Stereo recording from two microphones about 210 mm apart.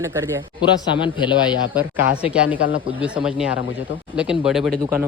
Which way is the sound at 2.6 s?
70° left (ahead or behind).